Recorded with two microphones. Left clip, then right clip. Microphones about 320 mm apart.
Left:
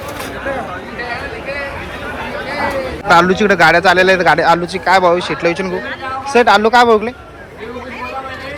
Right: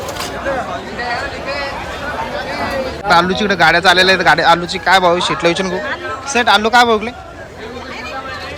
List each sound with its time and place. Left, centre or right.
3.1 s a man's voice: centre